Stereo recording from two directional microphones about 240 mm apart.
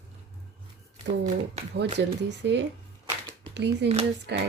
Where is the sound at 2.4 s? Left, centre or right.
Right.